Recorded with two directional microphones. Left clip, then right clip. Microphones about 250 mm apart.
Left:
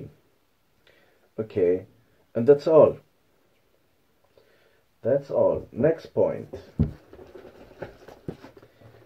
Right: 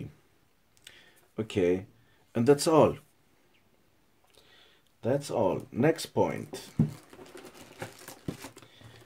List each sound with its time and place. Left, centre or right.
1.3 s speech: right
5.0 s speech: right